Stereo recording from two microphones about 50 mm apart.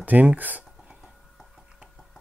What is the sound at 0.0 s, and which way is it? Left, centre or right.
Speech, right.